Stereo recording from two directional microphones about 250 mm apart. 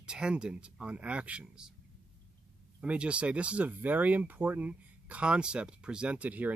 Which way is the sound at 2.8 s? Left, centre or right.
Centre.